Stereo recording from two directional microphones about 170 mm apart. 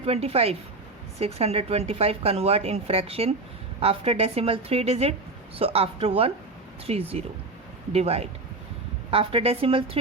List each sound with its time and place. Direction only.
0.0 s a woman's voice: 35° right (ahead or behind)